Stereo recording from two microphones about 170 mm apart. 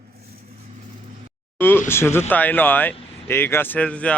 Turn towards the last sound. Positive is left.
turn(degrees=5)  # may be behind; listen again after turning